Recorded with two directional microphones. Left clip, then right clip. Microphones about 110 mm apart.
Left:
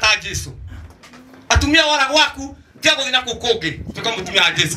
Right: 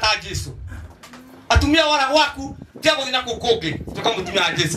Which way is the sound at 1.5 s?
35° left (ahead or behind).